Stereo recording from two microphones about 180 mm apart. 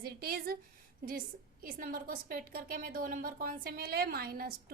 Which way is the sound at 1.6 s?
55° right (ahead or behind).